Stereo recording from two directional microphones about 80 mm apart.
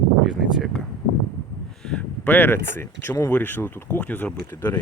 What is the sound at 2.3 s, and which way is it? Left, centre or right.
Speech, left.